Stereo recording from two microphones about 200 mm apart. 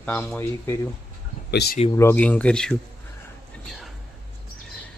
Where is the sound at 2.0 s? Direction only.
10° left (ahead or behind).